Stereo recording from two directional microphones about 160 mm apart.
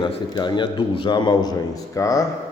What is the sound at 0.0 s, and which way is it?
A man's voice, 30° left (ahead or behind).